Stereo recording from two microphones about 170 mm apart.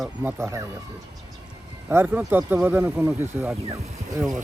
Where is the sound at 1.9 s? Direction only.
10° right (ahead or behind).